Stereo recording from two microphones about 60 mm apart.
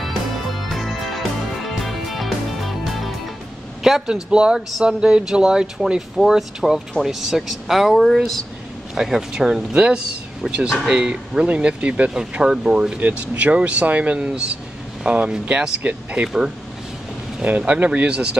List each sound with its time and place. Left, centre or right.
0.7 s music: centre
3.8 s speech: centre
10.9 s speech: centre
17.4 s speech: right